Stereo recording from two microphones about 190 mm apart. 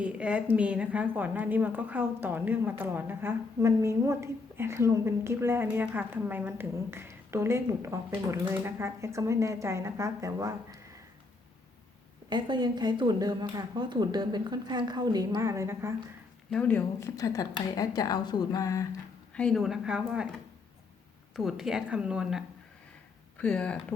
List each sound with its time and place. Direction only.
0.0 s a woman's voice: 5° right (ahead or behind)
12.3 s speech: 25° right (ahead or behind)
16.5 s a woman's voice: 5° left (ahead or behind)
19.3 s a woman's voice: 5° left (ahead or behind)
21.3 s a woman's voice: centre (ahead or behind)